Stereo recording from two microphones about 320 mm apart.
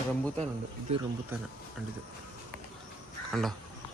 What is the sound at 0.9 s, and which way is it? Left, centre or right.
Speech, centre.